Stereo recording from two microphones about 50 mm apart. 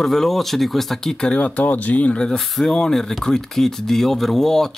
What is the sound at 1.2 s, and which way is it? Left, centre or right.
Speech, left.